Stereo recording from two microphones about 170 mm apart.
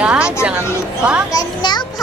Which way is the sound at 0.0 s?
5° right (ahead or behind).